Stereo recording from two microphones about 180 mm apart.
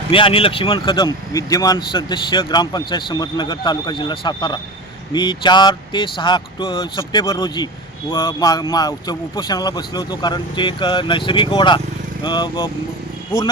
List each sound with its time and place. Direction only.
0.1 s speech: 30° left (ahead or behind)